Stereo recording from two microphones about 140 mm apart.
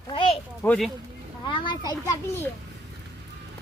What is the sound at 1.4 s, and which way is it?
Speech, 35° left (ahead or behind).